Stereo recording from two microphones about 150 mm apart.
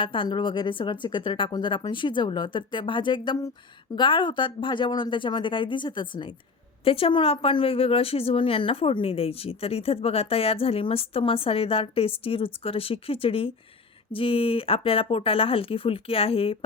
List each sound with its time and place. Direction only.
0.0 s a woman's voice: 35° left (ahead or behind)